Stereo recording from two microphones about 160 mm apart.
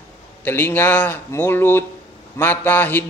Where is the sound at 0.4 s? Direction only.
15° left (ahead or behind).